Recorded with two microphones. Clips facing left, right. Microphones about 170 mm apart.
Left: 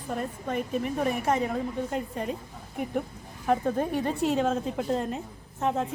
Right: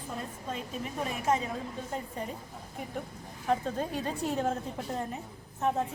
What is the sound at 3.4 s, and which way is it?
A woman's voice, 65° left (ahead or behind).